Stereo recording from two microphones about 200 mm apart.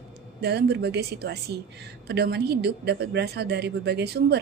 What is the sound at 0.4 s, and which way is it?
A woman's voice, 55° right (ahead or behind).